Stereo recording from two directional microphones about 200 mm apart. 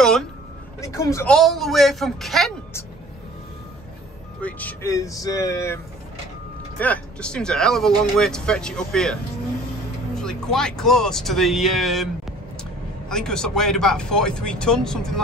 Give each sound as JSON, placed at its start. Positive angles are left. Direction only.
{"t": 0.0, "sound": "a sound", "side_deg": 5}
{"t": 0.7, "sound": "speech", "side_deg": 15}
{"t": 1.3, "sound": "speech", "side_deg": 0}
{"t": 4.4, "sound": "speech", "side_deg": 5}
{"t": 6.8, "sound": "speech", "side_deg": 5}
{"t": 13.1, "sound": "speech", "side_deg": 5}